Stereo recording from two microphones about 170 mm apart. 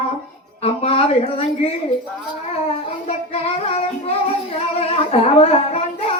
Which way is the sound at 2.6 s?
35° left (ahead or behind).